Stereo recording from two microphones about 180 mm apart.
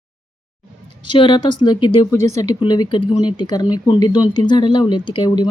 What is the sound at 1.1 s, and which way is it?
Speech, 25° left (ahead or behind).